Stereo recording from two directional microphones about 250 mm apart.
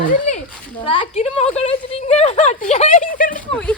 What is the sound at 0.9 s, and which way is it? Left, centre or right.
A woman's voice, left.